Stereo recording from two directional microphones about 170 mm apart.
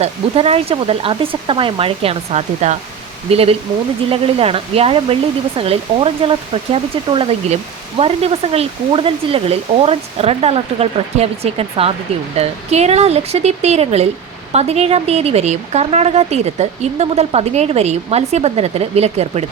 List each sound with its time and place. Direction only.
0.0 s speech: 35° right (ahead or behind)